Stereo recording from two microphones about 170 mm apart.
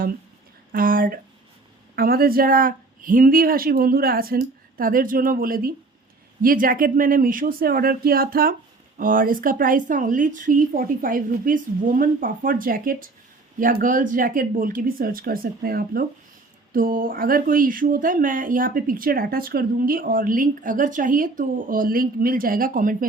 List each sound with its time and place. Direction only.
0.7 s a woman's voice: 55° right (ahead or behind)